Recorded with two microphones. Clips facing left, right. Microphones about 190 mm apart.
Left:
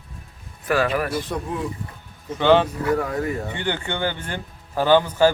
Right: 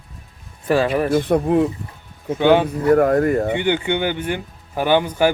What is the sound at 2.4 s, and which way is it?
Speech, 15° right (ahead or behind).